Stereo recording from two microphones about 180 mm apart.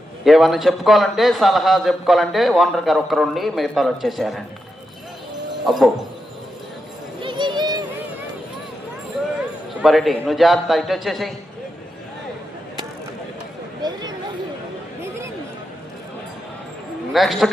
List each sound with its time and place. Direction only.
0.3 s a man's voice: centre (ahead or behind)
5.7 s a man's voice: centre (ahead or behind)
7.2 s a sound: 25° right (ahead or behind)
9.8 s a man's voice: centre (ahead or behind)
17.1 s a man's voice: centre (ahead or behind)